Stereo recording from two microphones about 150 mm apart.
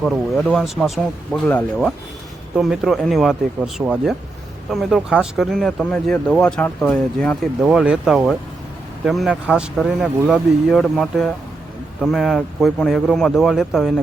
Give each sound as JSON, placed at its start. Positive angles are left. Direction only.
{"t": 0.0, "sound": "speech", "side_deg": 0}
{"t": 2.6, "sound": "speech", "side_deg": 0}
{"t": 7.6, "sound": "speech", "side_deg": -5}